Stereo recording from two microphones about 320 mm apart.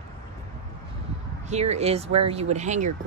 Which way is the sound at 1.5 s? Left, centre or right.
Centre.